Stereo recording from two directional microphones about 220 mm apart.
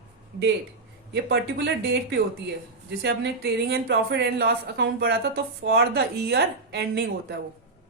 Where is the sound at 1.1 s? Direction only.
50° right (ahead or behind).